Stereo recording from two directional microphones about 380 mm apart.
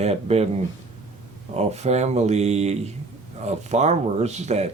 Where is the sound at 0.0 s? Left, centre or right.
Centre.